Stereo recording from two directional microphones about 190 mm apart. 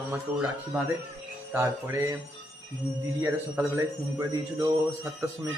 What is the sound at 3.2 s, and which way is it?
A man's voice, 15° right (ahead or behind).